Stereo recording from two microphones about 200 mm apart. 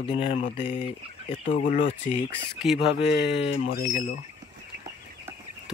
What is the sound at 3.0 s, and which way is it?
Speech, 60° left (ahead or behind).